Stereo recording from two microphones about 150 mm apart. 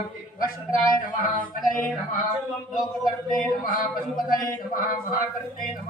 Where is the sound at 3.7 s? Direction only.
70° left (ahead or behind).